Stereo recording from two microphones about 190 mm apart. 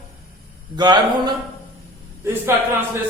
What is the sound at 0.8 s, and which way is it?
Speech, 20° right (ahead or behind).